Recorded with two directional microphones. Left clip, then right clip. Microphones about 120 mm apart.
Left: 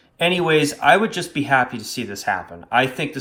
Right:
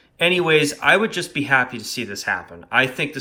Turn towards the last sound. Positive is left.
turn(degrees=25)  # may be behind; listen again after turning